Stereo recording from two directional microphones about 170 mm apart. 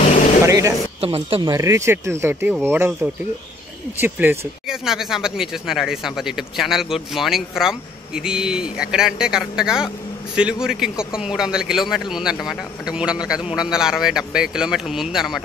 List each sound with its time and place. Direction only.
0.5 s speech: 20° right (ahead or behind)
1.0 s speech: 35° right (ahead or behind)
1.5 s speech: 15° right (ahead or behind); by 15.4 s centre (ahead or behind)